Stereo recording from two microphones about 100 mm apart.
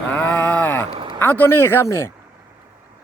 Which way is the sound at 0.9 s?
60° right (ahead or behind).